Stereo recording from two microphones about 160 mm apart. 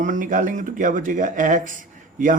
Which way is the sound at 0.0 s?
55° right (ahead or behind).